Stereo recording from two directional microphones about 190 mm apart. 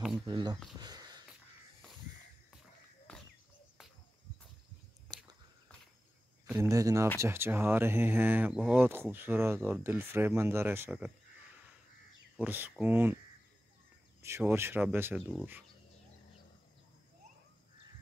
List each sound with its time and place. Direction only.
0.3 s speech: 20° right (ahead or behind)
0.7 s a sound: 20° right (ahead or behind)
3.1 s cricket: 5° left (ahead or behind)
6.5 s speech: 15° right (ahead or behind)
12.4 s speech: 10° right (ahead or behind)
14.2 s speech: 15° right (ahead or behind)